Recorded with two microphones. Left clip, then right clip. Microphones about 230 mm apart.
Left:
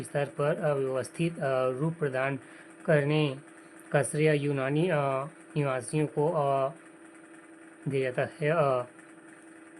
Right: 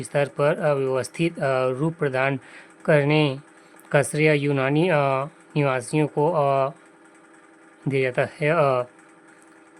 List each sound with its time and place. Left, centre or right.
0.0 s speech: right
7.9 s speech: right